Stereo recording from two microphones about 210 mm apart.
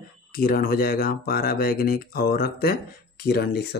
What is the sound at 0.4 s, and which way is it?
Speech, 45° left (ahead or behind).